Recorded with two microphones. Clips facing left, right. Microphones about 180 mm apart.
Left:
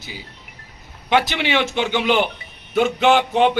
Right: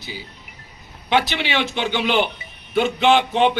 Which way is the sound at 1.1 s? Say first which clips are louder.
Left 2 dB; 15° left (ahead or behind).